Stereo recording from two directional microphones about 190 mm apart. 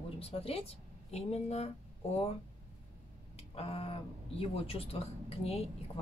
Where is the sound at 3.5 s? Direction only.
30° left (ahead or behind).